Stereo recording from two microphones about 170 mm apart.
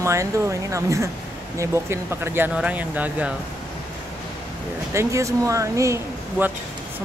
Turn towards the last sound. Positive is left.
turn(degrees=-15)  # may be behind; listen again after turning